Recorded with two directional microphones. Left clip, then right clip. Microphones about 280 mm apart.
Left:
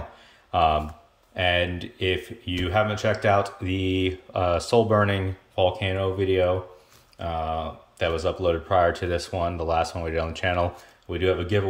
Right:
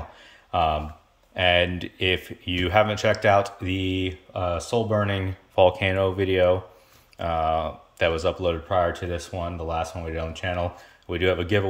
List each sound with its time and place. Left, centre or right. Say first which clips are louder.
0.5 s speech: left 2 dB; centre
5.6 s speech: right 4 dB; centre